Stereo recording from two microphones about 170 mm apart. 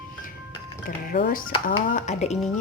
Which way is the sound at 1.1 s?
55° left (ahead or behind).